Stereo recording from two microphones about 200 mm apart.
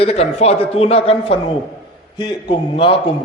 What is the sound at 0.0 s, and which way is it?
A man's voice, 30° left (ahead or behind).